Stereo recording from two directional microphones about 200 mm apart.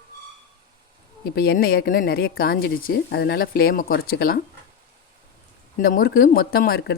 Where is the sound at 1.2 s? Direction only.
50° left (ahead or behind).